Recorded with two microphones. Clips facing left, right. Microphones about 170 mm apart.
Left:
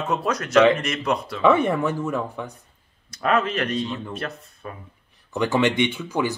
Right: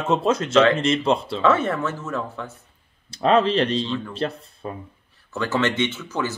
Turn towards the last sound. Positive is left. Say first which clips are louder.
# left 2 dB
turn(degrees=15)  # may be behind; listen again after turning